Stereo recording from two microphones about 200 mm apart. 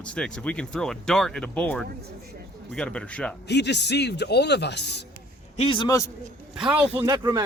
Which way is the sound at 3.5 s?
60° left (ahead or behind).